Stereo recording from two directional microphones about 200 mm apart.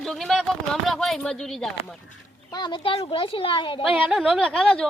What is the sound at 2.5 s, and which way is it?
Speech, 20° left (ahead or behind).